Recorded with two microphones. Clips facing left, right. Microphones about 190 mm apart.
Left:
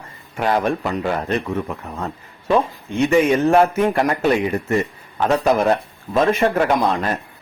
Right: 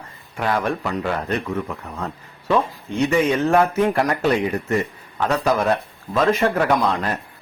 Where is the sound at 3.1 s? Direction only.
20° left (ahead or behind).